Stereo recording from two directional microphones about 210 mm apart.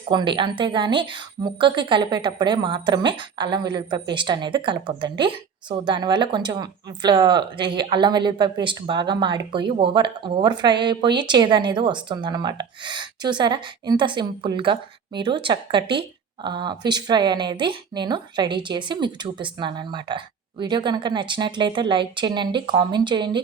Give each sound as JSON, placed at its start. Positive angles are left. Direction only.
{"t": 0.1, "sound": "a woman's voice", "side_deg": -20}